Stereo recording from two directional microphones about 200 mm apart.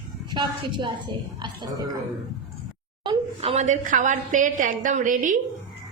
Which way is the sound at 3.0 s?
30° right (ahead or behind).